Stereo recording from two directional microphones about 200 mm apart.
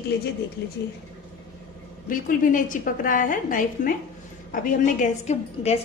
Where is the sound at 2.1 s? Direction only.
40° left (ahead or behind).